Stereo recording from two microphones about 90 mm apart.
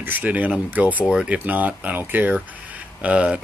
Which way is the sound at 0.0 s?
20° right (ahead or behind).